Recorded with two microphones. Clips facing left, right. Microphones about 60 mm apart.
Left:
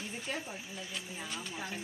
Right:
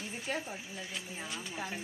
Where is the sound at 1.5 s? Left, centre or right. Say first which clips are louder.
Right 4 dB; right.